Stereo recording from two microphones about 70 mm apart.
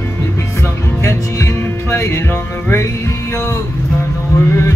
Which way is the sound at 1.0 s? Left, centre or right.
Left.